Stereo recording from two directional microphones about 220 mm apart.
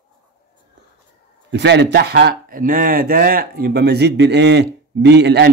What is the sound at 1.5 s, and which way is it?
Speech, 50° right (ahead or behind).